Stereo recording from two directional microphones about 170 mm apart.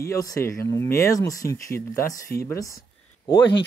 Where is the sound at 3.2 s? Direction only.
30° left (ahead or behind).